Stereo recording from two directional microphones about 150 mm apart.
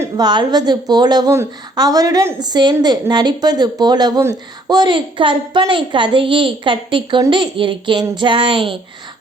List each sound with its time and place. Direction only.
0.2 s a woman's voice: 30° right (ahead or behind)